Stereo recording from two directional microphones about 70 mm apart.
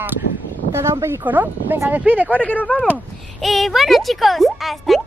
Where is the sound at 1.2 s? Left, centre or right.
Right.